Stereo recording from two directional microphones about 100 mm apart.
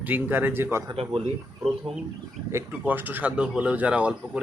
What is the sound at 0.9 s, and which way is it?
Speech, 65° right (ahead or behind).